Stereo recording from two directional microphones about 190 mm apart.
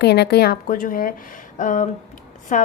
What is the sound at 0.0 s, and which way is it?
A woman's voice, 60° left (ahead or behind).